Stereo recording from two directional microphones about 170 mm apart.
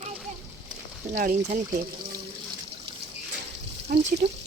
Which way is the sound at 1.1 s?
50° right (ahead or behind).